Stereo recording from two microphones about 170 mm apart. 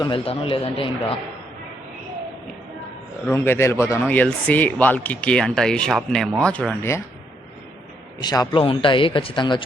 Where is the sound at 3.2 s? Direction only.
15° left (ahead or behind).